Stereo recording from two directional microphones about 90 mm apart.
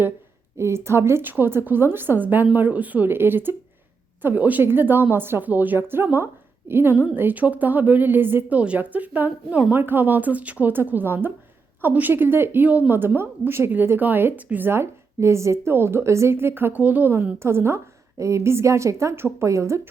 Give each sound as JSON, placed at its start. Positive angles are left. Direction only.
{"t": 0.5, "sound": "a woman's voice", "side_deg": -30}